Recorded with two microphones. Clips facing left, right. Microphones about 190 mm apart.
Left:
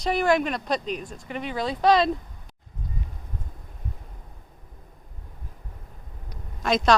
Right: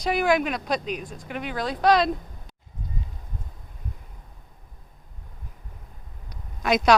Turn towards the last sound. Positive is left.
turn(degrees=-5)  # may be behind; listen again after turning